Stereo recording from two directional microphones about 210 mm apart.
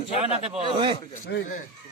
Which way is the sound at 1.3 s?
55° left (ahead or behind).